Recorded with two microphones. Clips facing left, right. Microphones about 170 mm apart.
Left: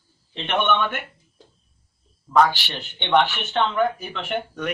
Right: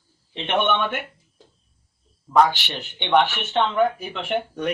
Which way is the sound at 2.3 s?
10° right (ahead or behind).